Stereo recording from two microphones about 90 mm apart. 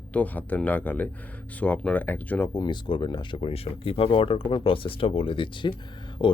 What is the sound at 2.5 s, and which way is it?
Speech, 60° left (ahead or behind).